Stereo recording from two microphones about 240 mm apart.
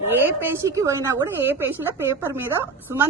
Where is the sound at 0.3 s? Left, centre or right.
Centre.